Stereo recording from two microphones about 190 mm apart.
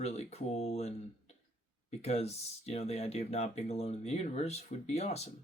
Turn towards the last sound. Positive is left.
turn(degrees=35)  # may be behind; listen again after turning